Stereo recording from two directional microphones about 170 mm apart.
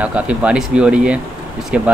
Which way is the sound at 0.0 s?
10° right (ahead or behind).